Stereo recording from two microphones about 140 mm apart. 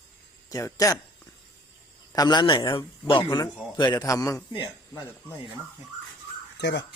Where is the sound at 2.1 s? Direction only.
30° left (ahead or behind).